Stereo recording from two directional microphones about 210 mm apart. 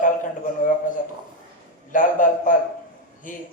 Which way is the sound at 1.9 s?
40° left (ahead or behind).